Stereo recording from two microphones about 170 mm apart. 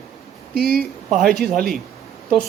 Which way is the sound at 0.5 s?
65° right (ahead or behind).